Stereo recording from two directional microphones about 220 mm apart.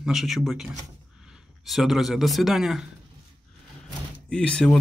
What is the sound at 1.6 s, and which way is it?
Speech, centre (ahead or behind).